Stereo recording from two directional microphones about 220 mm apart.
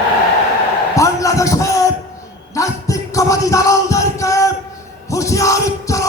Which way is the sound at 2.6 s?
15° left (ahead or behind).